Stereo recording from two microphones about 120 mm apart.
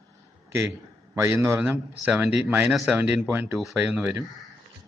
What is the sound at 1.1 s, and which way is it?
Speech, 25° right (ahead or behind).